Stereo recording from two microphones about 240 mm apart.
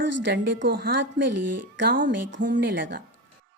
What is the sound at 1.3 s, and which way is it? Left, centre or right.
Speech, right.